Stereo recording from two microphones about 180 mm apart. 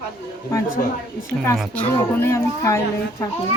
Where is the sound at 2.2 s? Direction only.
15° left (ahead or behind).